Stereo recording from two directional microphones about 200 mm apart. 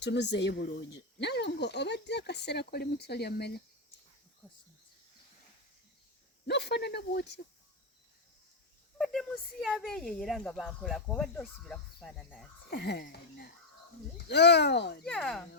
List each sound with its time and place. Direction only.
0.0 s speech: 60° left (ahead or behind)
6.5 s speech: 55° left (ahead or behind)
9.0 s speech: centre (ahead or behind)
12.7 s speech: 55° left (ahead or behind)
15.0 s speech: 5° left (ahead or behind)